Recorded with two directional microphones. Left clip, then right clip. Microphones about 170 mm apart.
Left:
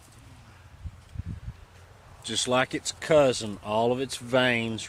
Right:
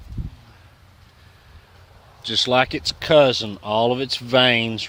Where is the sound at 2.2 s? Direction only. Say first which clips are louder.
Right 7 dB; 30° right (ahead or behind).